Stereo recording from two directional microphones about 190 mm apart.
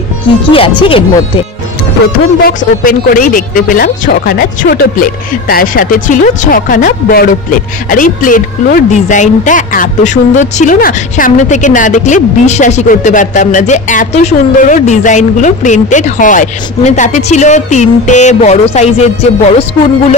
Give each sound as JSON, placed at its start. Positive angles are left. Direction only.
{"t": 0.5, "sound": "speech", "side_deg": 30}
{"t": 2.4, "sound": "speech", "side_deg": 50}